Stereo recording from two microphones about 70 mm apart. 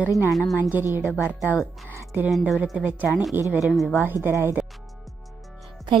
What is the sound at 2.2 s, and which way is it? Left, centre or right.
Speech, centre.